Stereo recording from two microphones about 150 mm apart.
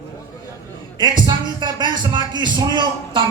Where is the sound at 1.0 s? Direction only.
30° right (ahead or behind).